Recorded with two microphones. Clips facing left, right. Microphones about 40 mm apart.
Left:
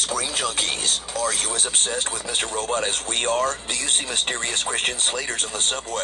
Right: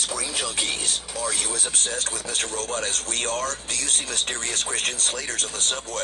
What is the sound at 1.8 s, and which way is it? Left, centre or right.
Speech, left.